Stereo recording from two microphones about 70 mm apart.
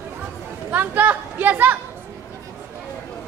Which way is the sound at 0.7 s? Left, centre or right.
Right.